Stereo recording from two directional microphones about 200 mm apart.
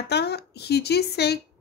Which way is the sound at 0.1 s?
55° left (ahead or behind).